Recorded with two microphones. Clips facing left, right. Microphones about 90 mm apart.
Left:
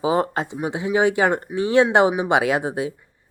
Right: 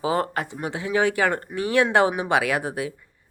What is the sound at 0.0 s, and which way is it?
Speech, 20° left (ahead or behind).